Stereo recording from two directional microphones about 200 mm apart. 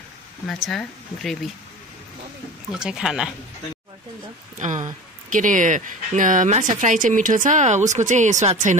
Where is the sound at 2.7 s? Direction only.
5° right (ahead or behind).